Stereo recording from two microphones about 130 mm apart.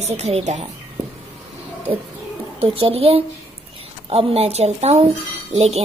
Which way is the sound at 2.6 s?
45° right (ahead or behind).